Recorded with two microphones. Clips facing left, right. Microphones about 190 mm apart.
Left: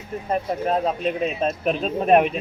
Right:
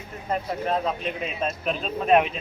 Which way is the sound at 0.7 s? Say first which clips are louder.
Left 4 dB; 40° left (ahead or behind).